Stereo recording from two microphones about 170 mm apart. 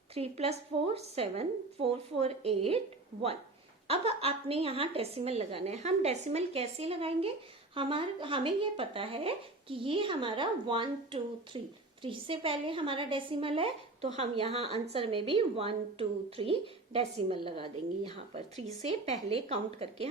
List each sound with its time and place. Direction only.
0.1 s a woman's voice: 35° right (ahead or behind)